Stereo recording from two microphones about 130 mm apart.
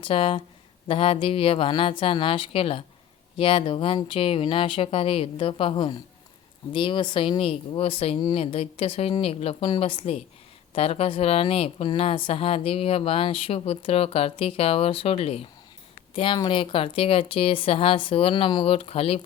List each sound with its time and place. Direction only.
0.0 s a woman's voice: 45° left (ahead or behind)
16.1 s a woman's voice: 40° left (ahead or behind)